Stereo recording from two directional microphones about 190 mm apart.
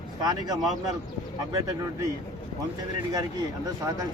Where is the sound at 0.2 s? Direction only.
20° right (ahead or behind).